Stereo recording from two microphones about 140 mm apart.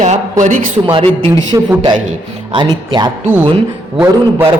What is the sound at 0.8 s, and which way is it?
A man's voice, 35° right (ahead or behind).